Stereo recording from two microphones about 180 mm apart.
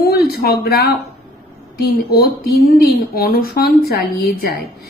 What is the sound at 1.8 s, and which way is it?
Speech, 60° left (ahead or behind).